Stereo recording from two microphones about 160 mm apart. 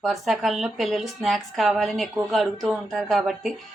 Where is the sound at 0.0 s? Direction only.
Centre (ahead or behind).